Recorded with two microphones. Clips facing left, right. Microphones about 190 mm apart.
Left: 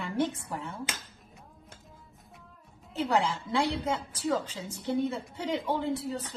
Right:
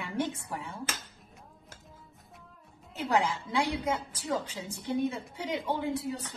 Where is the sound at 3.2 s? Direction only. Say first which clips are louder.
Left 1 dB; 15° right (ahead or behind).